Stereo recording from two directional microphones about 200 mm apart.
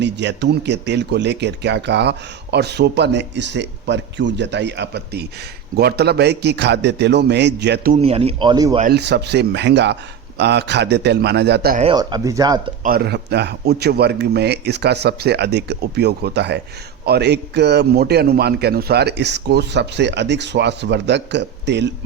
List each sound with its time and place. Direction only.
0.0 s speech: 60° right (ahead or behind)
8.0 s speech: 30° right (ahead or behind)
8.9 s speech: 55° right (ahead or behind)
11.8 s speech: 25° right (ahead or behind)
12.8 s speech: 50° right (ahead or behind)